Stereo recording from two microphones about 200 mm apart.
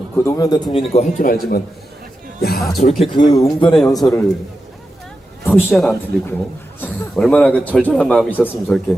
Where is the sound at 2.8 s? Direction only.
35° left (ahead or behind).